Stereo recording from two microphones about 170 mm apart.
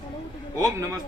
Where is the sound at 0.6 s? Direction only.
20° right (ahead or behind).